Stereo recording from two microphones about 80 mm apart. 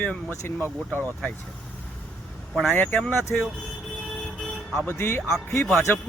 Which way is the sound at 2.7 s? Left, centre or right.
Centre.